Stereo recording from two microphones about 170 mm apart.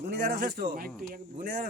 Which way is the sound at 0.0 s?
50° right (ahead or behind).